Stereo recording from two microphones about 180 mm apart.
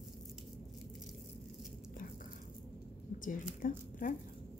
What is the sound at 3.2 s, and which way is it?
Speech, 50° left (ahead or behind).